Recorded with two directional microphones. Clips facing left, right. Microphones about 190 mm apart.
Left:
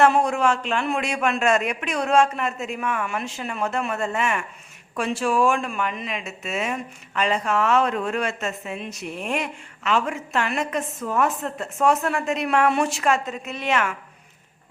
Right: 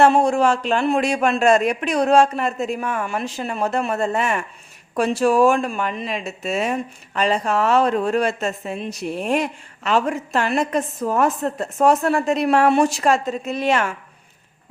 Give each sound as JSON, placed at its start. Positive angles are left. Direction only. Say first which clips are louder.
{"t": 0.0, "sound": "speech", "louder": "right 3 dB", "side_deg": -30}